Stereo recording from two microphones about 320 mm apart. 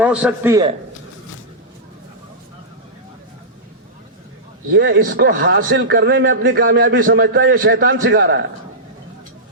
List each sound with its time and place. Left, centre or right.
0.0 s a man's voice: centre
4.7 s a man's voice: right